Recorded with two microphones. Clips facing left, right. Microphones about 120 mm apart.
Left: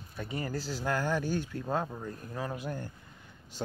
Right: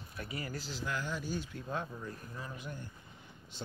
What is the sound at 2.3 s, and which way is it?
Speech, 80° left.